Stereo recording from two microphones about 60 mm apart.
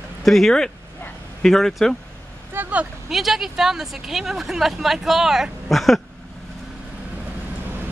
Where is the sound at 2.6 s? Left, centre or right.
Right.